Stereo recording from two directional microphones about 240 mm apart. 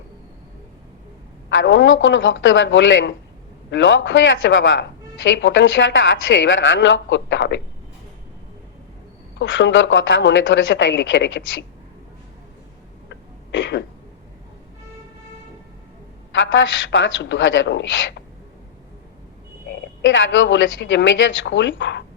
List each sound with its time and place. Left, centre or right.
1.5 s speech: left
9.4 s speech: left
13.1 s throat clearing: left
16.3 s speech: left
19.7 s speech: left